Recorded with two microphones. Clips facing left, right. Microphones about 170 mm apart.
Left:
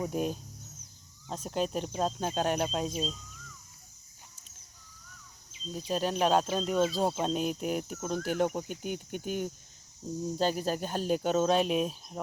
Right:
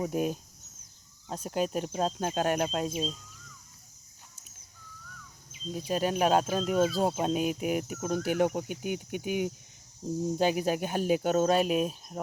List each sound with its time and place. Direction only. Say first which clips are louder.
0.1 s speech: right 2 dB; 5° right (ahead or behind)
5.7 s speech: right 2 dB; 5° right (ahead or behind)